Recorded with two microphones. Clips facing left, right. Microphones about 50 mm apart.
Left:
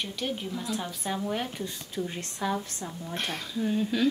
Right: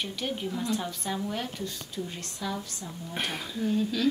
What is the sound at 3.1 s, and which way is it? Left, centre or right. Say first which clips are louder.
Speech: right 1 dB; centre.